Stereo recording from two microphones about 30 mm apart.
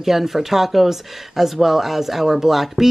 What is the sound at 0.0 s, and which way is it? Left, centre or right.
Speech, centre.